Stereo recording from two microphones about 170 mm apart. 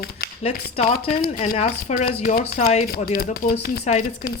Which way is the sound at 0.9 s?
65° left (ahead or behind).